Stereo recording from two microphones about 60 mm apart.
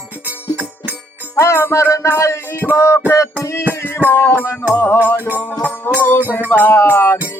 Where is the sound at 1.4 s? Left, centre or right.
Left.